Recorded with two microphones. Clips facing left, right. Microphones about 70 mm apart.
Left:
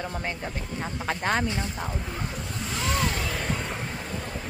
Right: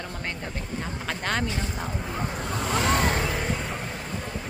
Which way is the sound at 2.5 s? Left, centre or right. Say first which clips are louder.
Right 6 dB; right.